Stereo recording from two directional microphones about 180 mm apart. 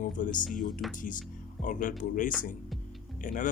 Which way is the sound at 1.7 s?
50° left (ahead or behind).